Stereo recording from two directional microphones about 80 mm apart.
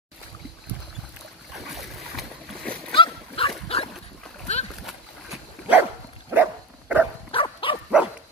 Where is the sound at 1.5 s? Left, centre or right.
Centre.